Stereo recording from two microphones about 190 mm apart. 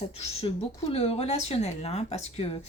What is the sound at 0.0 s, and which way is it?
Speech, 35° left (ahead or behind).